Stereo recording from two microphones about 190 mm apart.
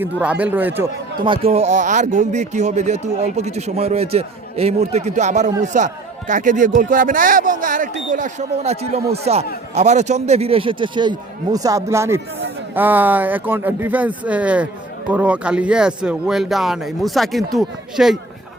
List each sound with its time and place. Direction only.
0.0 s speech: 5° right (ahead or behind)
1.2 s a man's voice: 25° right (ahead or behind); by 18.2 s centre (ahead or behind)